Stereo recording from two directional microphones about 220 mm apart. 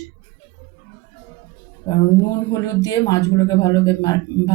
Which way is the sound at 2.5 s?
15° left (ahead or behind).